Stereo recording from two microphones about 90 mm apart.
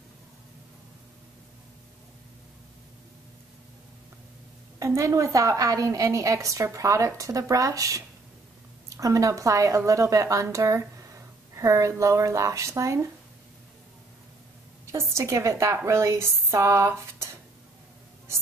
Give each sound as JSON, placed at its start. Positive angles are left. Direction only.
{"t": 4.7, "sound": "a woman's voice", "side_deg": -35}
{"t": 14.9, "sound": "a woman's voice", "side_deg": -30}